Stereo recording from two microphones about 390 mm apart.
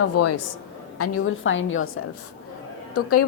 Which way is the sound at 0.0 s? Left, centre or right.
Left.